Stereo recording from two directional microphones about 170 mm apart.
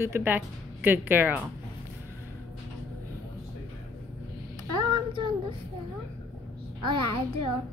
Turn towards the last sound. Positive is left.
turn(degrees=-30)  # may be behind; listen again after turning